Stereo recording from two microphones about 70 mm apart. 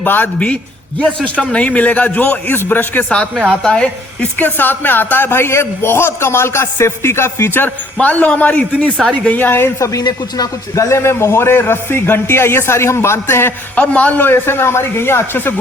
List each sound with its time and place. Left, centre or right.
0.0 s a man's voice: left
3.3 s a woman's voice: centre
4.4 s a man's voice: left
7.9 s a man's voice: left
9.4 s a man's voice: left
10.0 s a man's voice: left
13.9 s a man's voice: left